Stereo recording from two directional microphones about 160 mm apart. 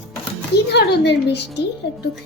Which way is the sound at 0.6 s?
90° left.